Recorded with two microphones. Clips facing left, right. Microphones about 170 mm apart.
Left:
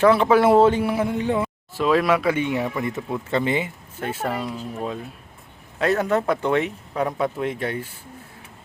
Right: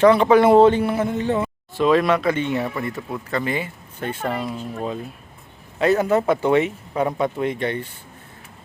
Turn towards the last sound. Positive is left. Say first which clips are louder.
# right 2 dB
turn(degrees=5)  # may be behind; listen again after turning